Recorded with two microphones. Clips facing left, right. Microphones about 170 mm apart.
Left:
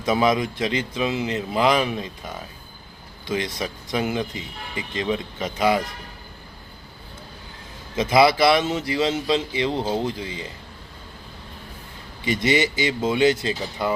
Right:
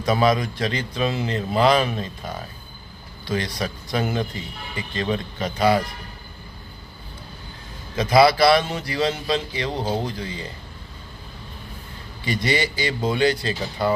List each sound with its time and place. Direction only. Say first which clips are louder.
0.0 s a man's voice: even; 20° left (ahead or behind)
3.2 s a man's voice: even; 20° left (ahead or behind)
7.9 s a man's voice: right 1 dB; 20° left (ahead or behind)
9.8 s speech: left 1 dB; 15° right (ahead or behind)
10.2 s a man's voice: even; 20° left (ahead or behind)
12.2 s a man's voice: left 2 dB; 20° left (ahead or behind)